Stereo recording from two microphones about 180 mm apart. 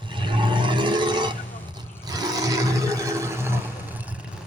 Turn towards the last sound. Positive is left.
turn(degrees=-15)  # may be behind; listen again after turning